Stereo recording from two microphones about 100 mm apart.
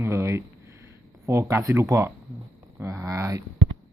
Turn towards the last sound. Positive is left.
turn(degrees=-30)  # may be behind; listen again after turning